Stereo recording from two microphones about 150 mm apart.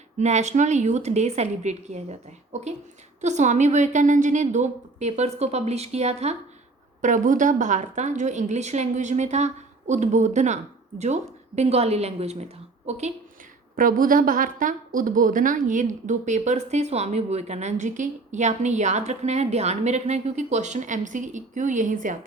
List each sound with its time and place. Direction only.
0.2 s a woman's voice: 50° right (ahead or behind)
7.0 s a woman's voice: 55° right (ahead or behind)
13.7 s a woman's voice: 65° right (ahead or behind)